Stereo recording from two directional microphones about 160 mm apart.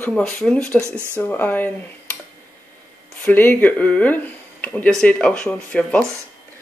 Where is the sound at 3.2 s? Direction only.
10° left (ahead or behind).